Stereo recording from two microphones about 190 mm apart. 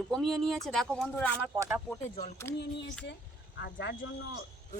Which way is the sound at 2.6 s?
70° left (ahead or behind).